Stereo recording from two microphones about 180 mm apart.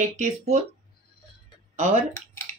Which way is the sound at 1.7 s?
40° right (ahead or behind).